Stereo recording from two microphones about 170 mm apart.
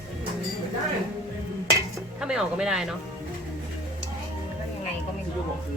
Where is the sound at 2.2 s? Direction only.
5° right (ahead or behind).